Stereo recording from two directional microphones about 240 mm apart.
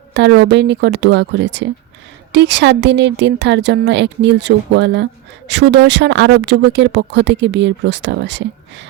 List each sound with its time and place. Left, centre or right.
0.1 s speech: right